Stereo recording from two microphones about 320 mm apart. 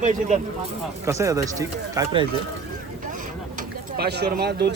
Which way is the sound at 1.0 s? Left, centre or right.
Centre.